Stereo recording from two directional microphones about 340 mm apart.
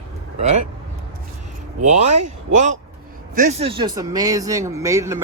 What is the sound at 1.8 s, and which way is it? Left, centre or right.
Speech, centre.